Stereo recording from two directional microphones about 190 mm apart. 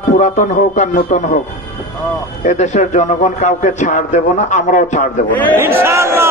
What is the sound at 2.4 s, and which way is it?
A man's voice, 40° left (ahead or behind).